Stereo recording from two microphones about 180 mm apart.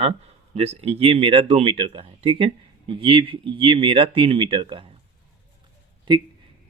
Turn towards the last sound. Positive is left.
turn(degrees=-25)  # may be behind; listen again after turning